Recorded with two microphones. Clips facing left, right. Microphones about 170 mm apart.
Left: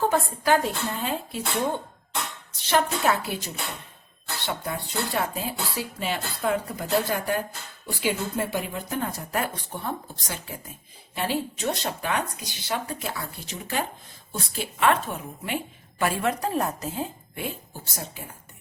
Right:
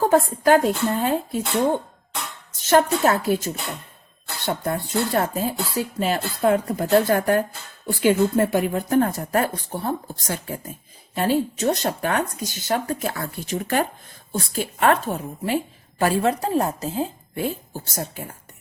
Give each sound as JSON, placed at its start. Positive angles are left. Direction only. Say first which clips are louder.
{"t": 0.1, "sound": "a woman's voice", "louder": "right 6 dB", "side_deg": -50}
{"t": 17.9, "sound": "speech", "louder": "right 7 dB", "side_deg": -50}